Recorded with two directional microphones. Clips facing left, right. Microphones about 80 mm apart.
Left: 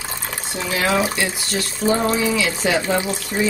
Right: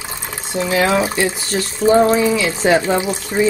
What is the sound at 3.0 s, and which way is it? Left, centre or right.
Speech, right.